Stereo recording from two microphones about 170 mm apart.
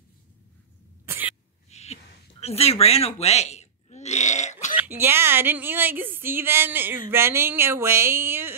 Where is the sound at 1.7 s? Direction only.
40° left (ahead or behind).